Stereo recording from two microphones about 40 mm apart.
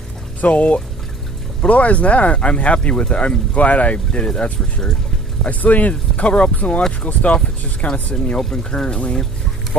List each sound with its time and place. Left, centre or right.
0.4 s speech: left
5.5 s speech: left
8.4 s speech: centre
8.8 s speech: left